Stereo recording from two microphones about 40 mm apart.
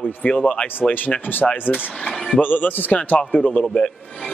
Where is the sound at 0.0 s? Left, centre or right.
Left.